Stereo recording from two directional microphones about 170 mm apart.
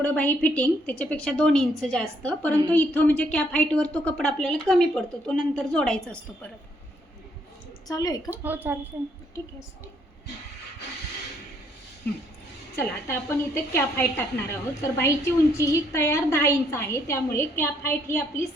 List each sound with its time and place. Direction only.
0.0 s a woman's voice: 10° left (ahead or behind)
7.9 s a woman's voice: 20° left (ahead or behind)
8.3 s speech: 10° right (ahead or behind)
12.7 s a woman's voice: 15° left (ahead or behind)